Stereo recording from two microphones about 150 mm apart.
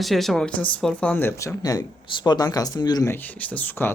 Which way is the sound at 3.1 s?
10° left (ahead or behind).